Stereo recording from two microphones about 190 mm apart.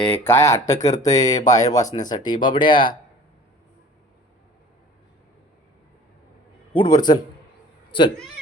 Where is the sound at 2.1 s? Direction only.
25° left (ahead or behind).